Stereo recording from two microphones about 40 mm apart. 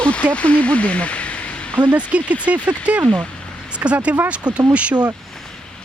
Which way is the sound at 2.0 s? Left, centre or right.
Right.